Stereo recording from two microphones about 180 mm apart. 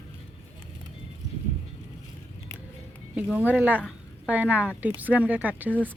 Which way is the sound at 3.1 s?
10° right (ahead or behind).